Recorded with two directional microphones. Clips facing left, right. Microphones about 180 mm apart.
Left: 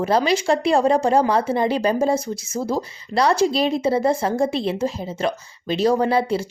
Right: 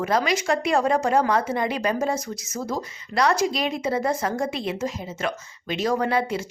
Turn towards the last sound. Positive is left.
turn(degrees=30)  # may be behind; listen again after turning